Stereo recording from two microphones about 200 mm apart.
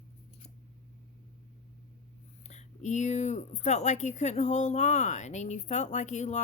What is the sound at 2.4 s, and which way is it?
Speech, 35° left (ahead or behind).